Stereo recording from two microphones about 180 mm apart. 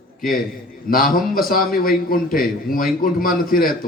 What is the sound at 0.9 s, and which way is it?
A man's voice, 50° left (ahead or behind).